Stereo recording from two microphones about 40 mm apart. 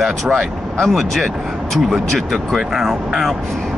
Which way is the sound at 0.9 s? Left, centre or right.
Centre.